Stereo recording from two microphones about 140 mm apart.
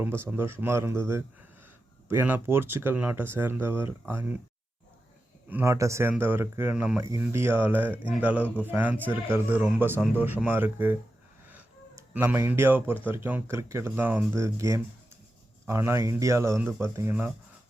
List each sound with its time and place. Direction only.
0.2 s speech: 15° right (ahead or behind)
5.5 s speech: 15° right (ahead or behind)